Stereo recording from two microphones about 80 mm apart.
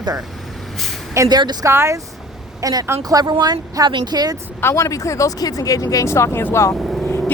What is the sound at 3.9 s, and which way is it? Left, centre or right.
Speech, right.